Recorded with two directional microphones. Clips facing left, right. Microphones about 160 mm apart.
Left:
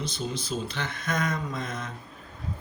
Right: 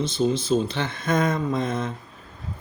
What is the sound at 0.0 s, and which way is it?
Speech, 25° right (ahead or behind).